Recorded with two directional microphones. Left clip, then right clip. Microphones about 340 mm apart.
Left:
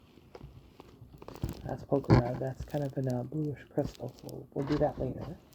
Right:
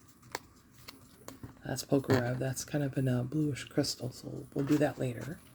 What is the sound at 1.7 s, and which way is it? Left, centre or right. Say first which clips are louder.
Speech: left 1 dB; right.